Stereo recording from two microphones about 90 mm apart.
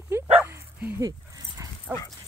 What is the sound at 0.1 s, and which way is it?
Dog, 30° right (ahead or behind).